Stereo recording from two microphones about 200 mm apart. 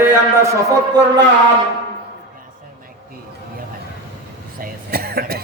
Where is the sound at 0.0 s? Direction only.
15° right (ahead or behind).